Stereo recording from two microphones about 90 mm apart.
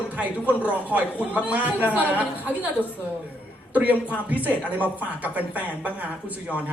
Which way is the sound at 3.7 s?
20° right (ahead or behind).